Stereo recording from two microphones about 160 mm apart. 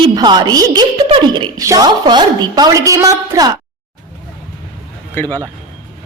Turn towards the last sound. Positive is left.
turn(degrees=15)  # may be behind; listen again after turning